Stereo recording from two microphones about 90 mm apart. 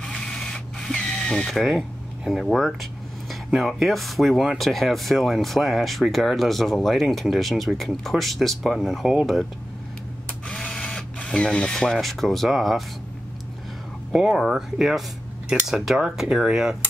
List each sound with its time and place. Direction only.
0.0 s printer: 5° left (ahead or behind)
1.5 s speech: centre (ahead or behind)
10.5 s cash register: 10° left (ahead or behind)
14.1 s speech: 5° right (ahead or behind)